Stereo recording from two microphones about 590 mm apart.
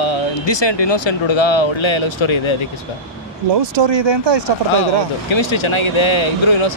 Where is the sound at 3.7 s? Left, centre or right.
Right.